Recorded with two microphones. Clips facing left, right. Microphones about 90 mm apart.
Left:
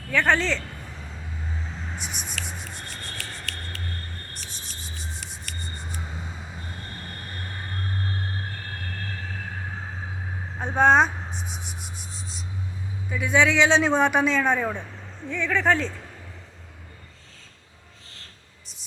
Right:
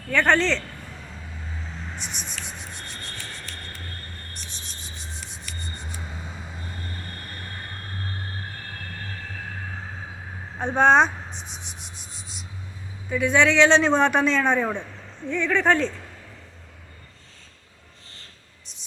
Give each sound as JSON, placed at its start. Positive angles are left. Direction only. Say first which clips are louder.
{"t": 0.1, "sound": "a man's voice", "louder": "right 2 dB", "side_deg": 5}
{"t": 2.0, "sound": "speech", "louder": "even", "side_deg": 5}
{"t": 2.4, "sound": "a sound", "louder": "left 1 dB", "side_deg": 0}
{"t": 3.2, "sound": "rub", "louder": "left 1 dB", "side_deg": 90}
{"t": 4.4, "sound": "rub", "louder": "left 1 dB", "side_deg": 0}
{"t": 5.5, "sound": "music", "louder": "left 1 dB", "side_deg": 60}
{"t": 10.6, "sound": "a sound", "louder": "right 1 dB", "side_deg": 5}
{"t": 13.1, "sound": "a man's voice", "louder": "right 2 dB", "side_deg": 5}